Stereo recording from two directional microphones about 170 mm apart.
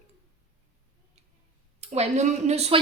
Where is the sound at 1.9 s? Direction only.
40° right (ahead or behind).